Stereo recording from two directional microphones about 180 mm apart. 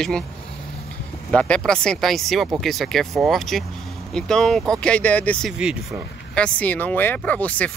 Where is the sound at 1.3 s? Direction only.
5° left (ahead or behind).